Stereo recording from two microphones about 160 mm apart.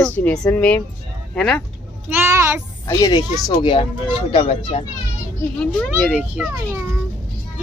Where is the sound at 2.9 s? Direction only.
25° left (ahead or behind).